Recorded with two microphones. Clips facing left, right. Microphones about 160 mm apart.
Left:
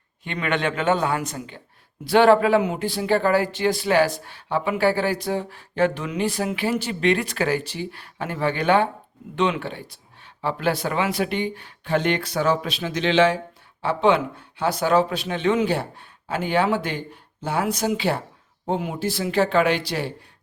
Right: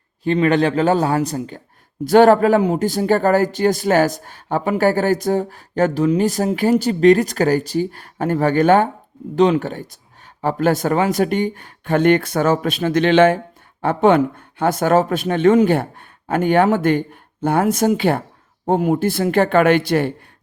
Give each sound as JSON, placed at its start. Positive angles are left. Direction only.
{"t": 0.3, "sound": "a man's voice", "side_deg": -35}